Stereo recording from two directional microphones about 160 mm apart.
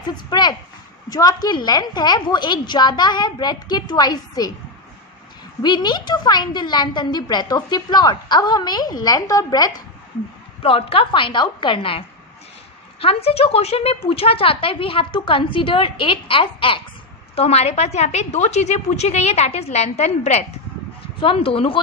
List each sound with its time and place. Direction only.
0.1 s a woman's voice: 25° left (ahead or behind)
5.6 s a woman's voice: 25° left (ahead or behind)
10.6 s a woman's voice: 35° left (ahead or behind)